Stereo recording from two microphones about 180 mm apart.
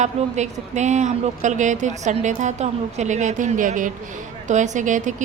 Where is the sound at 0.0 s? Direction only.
40° right (ahead or behind).